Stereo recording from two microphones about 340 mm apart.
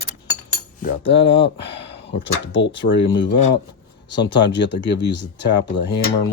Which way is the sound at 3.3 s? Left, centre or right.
Left.